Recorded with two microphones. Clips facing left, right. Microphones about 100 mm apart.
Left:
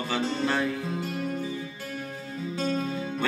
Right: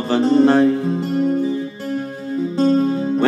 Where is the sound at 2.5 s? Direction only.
40° right (ahead or behind).